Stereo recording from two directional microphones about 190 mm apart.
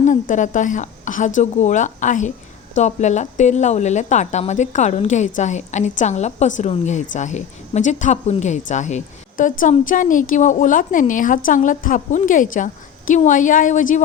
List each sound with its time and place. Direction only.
0.0 s a woman's voice: 40° left (ahead or behind)